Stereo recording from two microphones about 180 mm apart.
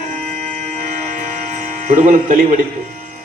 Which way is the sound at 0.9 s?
45° right (ahead or behind).